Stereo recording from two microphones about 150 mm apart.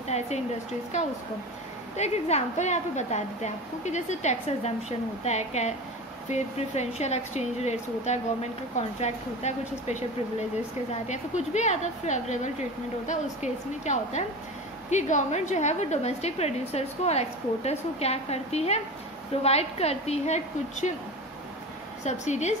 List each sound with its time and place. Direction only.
0.1 s a woman's voice: 45° left (ahead or behind)
2.0 s a woman's voice: 45° left (ahead or behind)
11.1 s a woman's voice: 50° left (ahead or behind)
22.0 s a woman's voice: 50° left (ahead or behind)